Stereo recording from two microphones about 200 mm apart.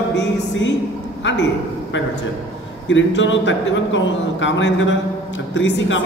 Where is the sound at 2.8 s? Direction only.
65° left (ahead or behind).